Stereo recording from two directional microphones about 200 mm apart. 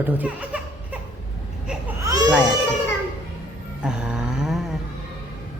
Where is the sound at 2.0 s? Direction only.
20° right (ahead or behind).